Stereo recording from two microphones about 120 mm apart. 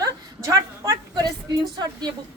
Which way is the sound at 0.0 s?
25° right (ahead or behind).